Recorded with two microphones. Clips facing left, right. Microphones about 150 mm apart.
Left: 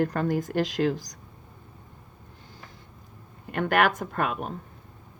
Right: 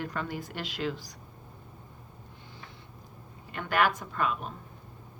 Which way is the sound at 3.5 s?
55° left (ahead or behind).